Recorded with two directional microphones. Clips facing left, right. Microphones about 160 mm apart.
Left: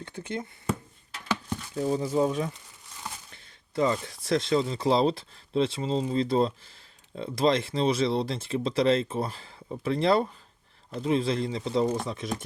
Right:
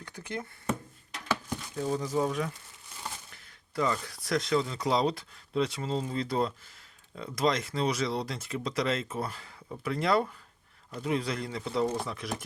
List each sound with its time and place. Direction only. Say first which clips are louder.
0.0 s speech: left 4 dB; 25° left (ahead or behind)
2.0 s speech: left 4 dB; 25° left (ahead or behind)